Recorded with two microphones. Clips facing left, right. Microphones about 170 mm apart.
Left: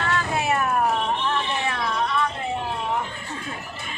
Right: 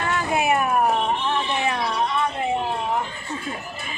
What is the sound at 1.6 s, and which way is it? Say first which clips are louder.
Music: right 3 dB; 20° right (ahead or behind).